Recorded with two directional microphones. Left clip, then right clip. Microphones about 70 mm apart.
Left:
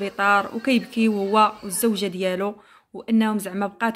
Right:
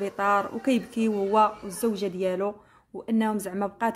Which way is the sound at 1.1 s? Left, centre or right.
Centre.